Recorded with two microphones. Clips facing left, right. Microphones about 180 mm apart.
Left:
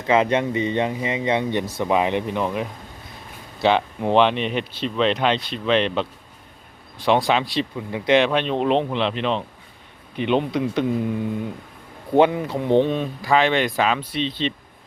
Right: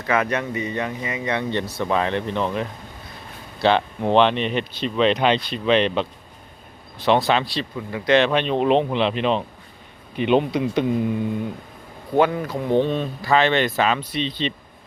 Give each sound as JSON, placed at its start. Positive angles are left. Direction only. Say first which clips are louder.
{"t": 0.0, "sound": "speech", "louder": "left 4 dB", "side_deg": 25}
{"t": 7.0, "sound": "speech", "louder": "even", "side_deg": 10}
{"t": 8.2, "sound": "speech", "louder": "right 1 dB", "side_deg": 0}
{"t": 12.1, "sound": "speech", "louder": "left 2 dB", "side_deg": 20}
{"t": 12.9, "sound": "speech", "louder": "even", "side_deg": 10}